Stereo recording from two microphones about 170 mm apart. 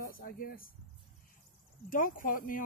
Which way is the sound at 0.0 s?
55° left (ahead or behind).